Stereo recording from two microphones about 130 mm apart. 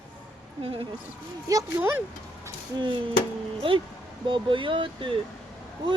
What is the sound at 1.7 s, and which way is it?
Speech, 15° right (ahead or behind).